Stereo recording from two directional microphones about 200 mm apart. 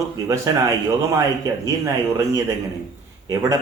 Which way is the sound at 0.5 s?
20° right (ahead or behind).